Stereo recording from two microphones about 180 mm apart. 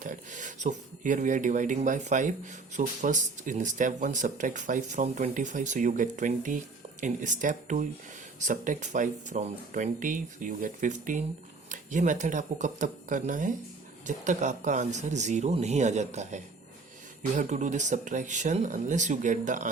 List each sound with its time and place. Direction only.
0.0 s speech: 45° right (ahead or behind)